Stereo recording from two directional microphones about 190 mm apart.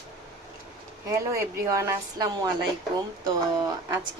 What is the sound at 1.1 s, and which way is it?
Speech, 15° right (ahead or behind).